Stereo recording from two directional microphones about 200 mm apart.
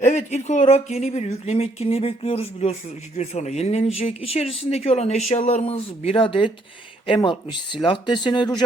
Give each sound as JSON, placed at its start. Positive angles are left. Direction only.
{"t": 0.0, "sound": "speech", "side_deg": 35}